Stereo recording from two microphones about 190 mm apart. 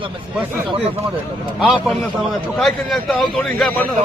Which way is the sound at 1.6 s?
Centre (ahead or behind).